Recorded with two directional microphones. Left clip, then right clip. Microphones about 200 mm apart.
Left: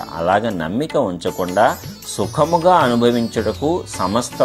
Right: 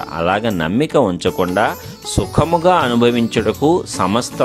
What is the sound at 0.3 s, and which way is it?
Speech, 25° right (ahead or behind).